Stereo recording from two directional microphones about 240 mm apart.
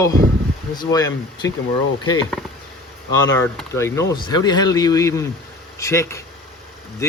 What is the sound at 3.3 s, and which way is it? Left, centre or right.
Speech, centre.